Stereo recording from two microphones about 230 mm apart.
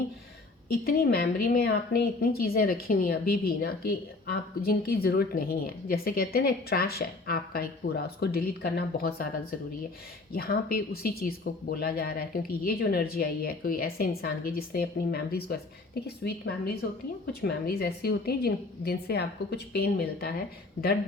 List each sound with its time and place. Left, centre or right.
0.7 s a woman's voice: left